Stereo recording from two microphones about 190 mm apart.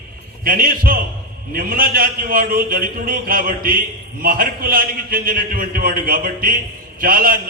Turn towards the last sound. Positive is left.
turn(degrees=-50)  # may be behind; listen again after turning